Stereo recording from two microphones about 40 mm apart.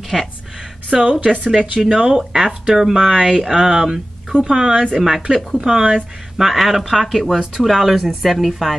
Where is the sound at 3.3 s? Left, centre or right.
Centre.